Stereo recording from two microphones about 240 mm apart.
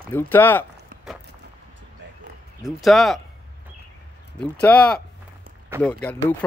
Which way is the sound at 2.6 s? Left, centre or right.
Centre.